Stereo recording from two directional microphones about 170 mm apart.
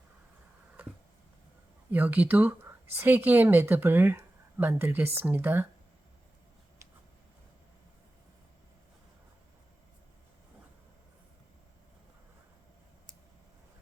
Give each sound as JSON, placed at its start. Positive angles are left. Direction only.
{"t": 1.9, "sound": "speech", "side_deg": -10}